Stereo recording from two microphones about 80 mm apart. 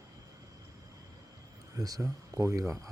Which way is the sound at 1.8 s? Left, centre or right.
Right.